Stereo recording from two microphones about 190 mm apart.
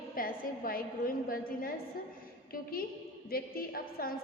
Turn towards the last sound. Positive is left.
turn(degrees=50)  # may be behind; listen again after turning